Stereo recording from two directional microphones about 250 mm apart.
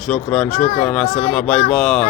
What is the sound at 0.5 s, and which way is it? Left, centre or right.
Speech, left.